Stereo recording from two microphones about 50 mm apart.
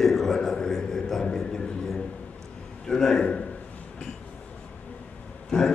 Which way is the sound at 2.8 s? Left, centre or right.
Centre.